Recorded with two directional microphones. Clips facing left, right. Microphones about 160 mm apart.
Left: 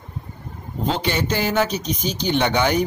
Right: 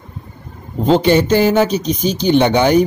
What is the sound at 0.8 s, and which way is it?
Speech, 30° right (ahead or behind).